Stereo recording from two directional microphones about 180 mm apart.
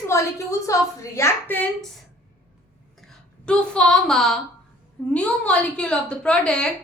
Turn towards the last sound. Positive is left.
turn(degrees=5)  # may be behind; listen again after turning